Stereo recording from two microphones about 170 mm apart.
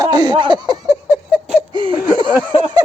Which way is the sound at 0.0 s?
25° right (ahead or behind).